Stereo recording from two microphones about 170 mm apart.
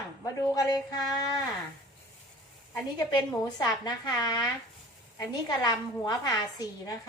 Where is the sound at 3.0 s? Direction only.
20° left (ahead or behind).